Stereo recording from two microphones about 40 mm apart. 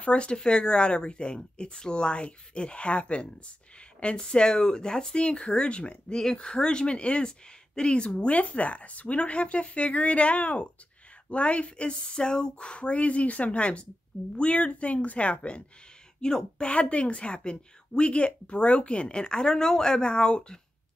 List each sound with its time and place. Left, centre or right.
0.0 s a woman's voice: left
4.3 s a woman's voice: left
16.2 s a woman's voice: centre